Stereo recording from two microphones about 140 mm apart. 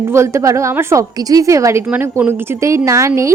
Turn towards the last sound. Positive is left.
turn(degrees=-20)  # may be behind; listen again after turning